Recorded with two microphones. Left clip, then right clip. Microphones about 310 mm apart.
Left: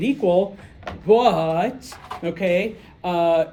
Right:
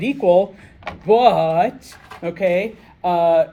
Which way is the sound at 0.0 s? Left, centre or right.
Centre.